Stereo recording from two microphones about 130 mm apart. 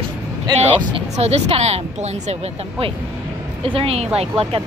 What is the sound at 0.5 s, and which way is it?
Speech, 55° right (ahead or behind).